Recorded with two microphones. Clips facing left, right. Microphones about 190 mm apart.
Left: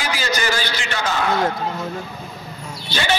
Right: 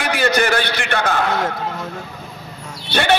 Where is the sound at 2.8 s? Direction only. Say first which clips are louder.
Right 5 dB; 60° right (ahead or behind).